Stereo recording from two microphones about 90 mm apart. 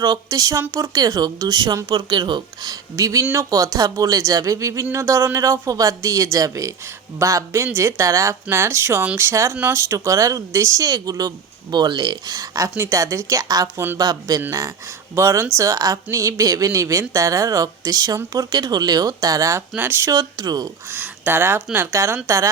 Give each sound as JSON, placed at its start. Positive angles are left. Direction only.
{"t": 0.0, "sound": "speech", "side_deg": -40}
{"t": 19.7, "sound": "speech", "side_deg": -20}
{"t": 20.1, "sound": "speech", "side_deg": -45}
{"t": 20.8, "sound": "speech", "side_deg": -20}